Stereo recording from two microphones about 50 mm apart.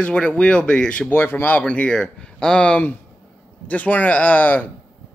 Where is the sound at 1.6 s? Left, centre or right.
Left.